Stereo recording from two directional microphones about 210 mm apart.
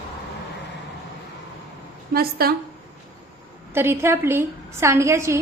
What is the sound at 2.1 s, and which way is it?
Speech, 45° right (ahead or behind).